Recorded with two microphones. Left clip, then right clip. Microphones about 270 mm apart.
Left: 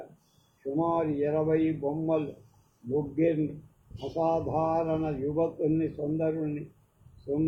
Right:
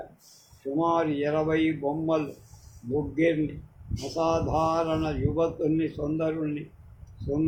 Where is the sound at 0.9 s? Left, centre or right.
Right.